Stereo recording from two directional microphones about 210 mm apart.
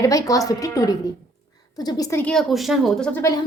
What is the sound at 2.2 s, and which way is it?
A woman's voice, centre (ahead or behind).